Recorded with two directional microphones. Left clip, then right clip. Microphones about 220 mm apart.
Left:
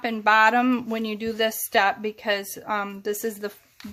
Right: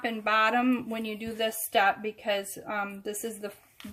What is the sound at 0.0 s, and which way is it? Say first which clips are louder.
Speech: left 7 dB; 30° left (ahead or behind).